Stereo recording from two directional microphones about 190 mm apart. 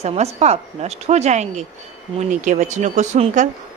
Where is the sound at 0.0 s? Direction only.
35° right (ahead or behind).